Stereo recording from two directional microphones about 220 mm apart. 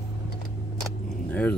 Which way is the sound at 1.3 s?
5° left (ahead or behind).